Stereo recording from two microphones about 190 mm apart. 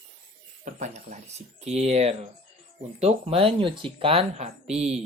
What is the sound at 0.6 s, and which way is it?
A woman's voice, 40° right (ahead or behind).